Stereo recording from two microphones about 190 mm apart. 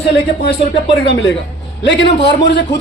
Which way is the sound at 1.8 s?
65° left (ahead or behind).